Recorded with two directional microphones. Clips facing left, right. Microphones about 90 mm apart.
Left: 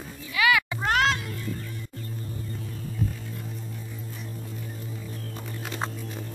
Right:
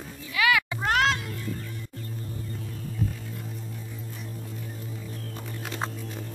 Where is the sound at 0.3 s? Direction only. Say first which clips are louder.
Left 1 dB; 10° left (ahead or behind).